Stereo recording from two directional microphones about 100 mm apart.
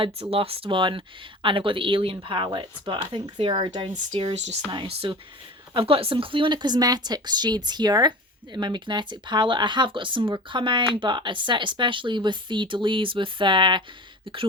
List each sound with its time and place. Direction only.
0.0 s speech: 70° right (ahead or behind)
4.9 s speech: 80° right
5.7 s speech: 70° right (ahead or behind)